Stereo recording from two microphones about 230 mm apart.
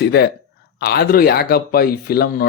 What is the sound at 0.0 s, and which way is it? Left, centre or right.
Speech, left.